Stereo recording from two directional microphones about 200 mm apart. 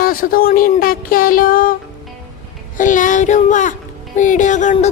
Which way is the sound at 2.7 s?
40° left (ahead or behind).